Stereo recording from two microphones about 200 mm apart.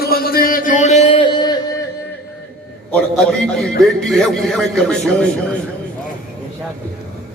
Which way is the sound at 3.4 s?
Centre (ahead or behind).